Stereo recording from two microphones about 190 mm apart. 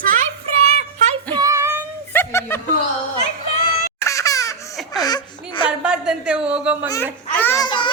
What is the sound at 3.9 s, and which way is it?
Laughter, 15° left (ahead or behind).